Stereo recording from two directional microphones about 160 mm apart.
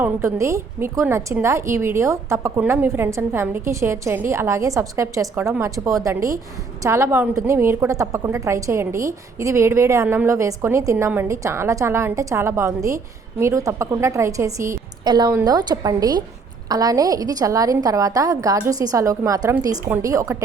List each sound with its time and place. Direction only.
0.0 s a woman's voice: 15° right (ahead or behind)